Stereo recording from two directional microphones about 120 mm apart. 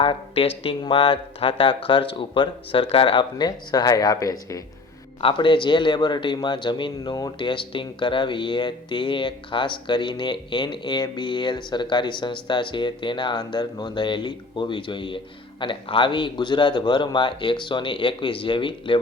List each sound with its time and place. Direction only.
0.0 s speech: 50° left (ahead or behind); by 4.6 s 30° left (ahead or behind)
5.2 s speech: 45° left (ahead or behind)